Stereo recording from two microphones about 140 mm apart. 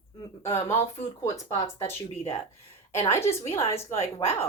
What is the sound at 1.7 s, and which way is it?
Speech, 40° left (ahead or behind).